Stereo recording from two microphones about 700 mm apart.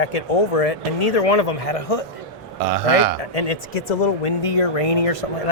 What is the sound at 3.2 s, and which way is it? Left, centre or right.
Speech, left.